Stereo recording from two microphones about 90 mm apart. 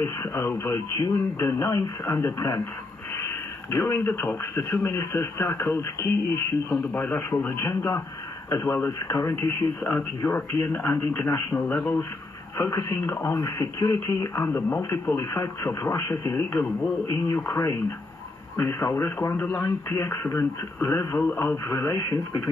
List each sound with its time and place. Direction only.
0.0 s speech: 30° left (ahead or behind)
6.9 s speech: 20° left (ahead or behind)
11.6 s a man's voice: 15° left (ahead or behind)
12.5 s speech: 35° left (ahead or behind)
18.6 s speech: 35° left (ahead or behind)
19.3 s a man's voice: 20° left (ahead or behind)
19.6 s speech: 30° left (ahead or behind)
21.2 s a man's voice: 20° left (ahead or behind)
21.6 s speech: 35° left (ahead or behind)